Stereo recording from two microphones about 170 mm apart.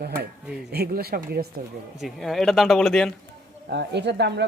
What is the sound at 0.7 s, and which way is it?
Speech, 65° right (ahead or behind).